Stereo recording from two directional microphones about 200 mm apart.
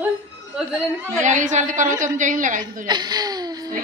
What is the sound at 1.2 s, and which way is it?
A woman's voice, 35° right (ahead or behind).